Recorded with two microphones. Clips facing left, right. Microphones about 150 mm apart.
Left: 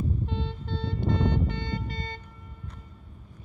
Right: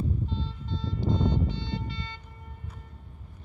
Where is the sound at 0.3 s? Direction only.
65° left (ahead or behind); by 2.2 s 45° left (ahead or behind).